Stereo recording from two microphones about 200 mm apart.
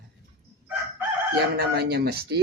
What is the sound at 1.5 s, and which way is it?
Speech, 50° right (ahead or behind).